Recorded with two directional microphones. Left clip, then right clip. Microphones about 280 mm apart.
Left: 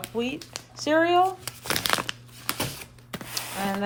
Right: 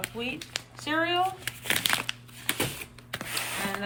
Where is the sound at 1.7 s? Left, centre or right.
Left.